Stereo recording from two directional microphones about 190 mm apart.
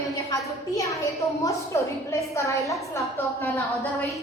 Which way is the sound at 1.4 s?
15° left (ahead or behind).